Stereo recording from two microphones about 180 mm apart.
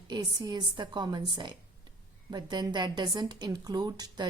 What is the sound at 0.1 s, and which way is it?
A woman's voice, 25° right (ahead or behind).